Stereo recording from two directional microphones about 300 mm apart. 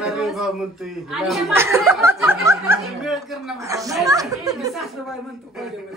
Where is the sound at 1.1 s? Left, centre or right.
Centre.